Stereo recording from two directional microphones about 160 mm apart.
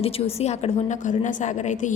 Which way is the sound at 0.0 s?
40° left (ahead or behind).